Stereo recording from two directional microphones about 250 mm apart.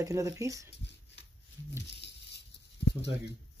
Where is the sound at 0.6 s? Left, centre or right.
Left.